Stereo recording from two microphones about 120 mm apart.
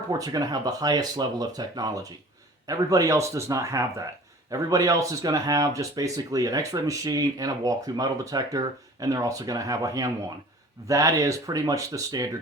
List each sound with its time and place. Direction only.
0.1 s speech: 30° right (ahead or behind)